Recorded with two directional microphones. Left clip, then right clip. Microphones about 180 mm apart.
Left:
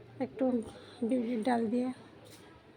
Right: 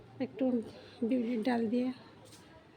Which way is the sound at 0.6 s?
50° right (ahead or behind).